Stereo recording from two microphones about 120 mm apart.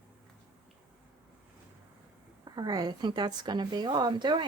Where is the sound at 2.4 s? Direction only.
35° right (ahead or behind).